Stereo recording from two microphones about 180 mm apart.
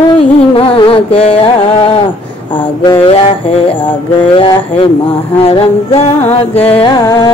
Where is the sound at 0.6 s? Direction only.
30° left (ahead or behind).